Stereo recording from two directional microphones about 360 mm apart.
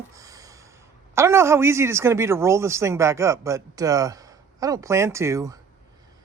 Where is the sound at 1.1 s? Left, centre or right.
Centre.